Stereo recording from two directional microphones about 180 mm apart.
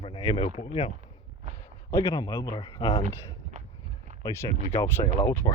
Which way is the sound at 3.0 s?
45° right (ahead or behind).